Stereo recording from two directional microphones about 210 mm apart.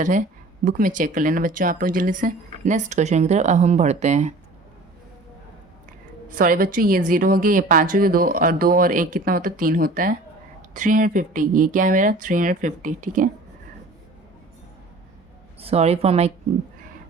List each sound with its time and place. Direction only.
0.0 s speech: 40° right (ahead or behind)
6.3 s speech: 40° right (ahead or behind)
15.6 s a woman's voice: 30° right (ahead or behind)